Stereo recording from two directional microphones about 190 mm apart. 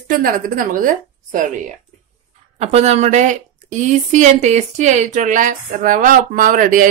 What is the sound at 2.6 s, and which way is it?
A woman's voice, 35° right (ahead or behind).